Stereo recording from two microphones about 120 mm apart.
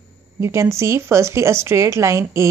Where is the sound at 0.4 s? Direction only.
25° right (ahead or behind).